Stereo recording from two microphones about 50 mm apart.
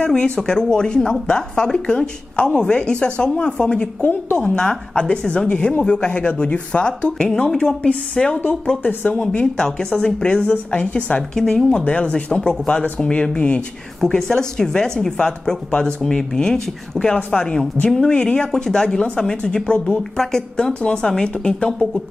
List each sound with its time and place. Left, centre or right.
0.0 s a woman's voice: left
9.1 s a woman's voice: centre
11.3 s a woman's voice: centre